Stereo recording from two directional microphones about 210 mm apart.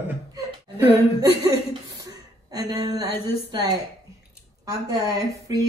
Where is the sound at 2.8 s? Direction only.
20° right (ahead or behind).